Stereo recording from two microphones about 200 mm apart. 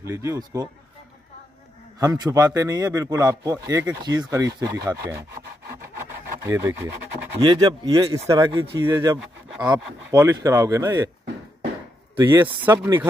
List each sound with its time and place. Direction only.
0.0 s a man's voice: 15° right (ahead or behind)
2.0 s a man's voice: 15° right (ahead or behind)
6.4 s a man's voice: 15° right (ahead or behind)
12.2 s a man's voice: 10° right (ahead or behind)